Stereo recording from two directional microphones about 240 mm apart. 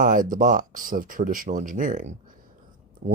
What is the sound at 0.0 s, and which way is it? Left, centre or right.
Speech, right.